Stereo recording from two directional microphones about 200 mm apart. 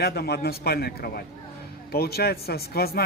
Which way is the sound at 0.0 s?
55° left (ahead or behind).